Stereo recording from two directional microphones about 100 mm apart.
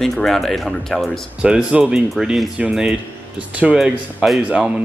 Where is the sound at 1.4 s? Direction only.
10° right (ahead or behind).